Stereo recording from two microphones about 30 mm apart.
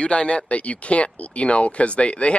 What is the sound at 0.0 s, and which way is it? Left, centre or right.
Speech, left.